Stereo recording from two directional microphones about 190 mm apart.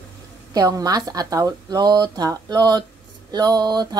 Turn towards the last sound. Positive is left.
turn(degrees=-20)  # may be behind; listen again after turning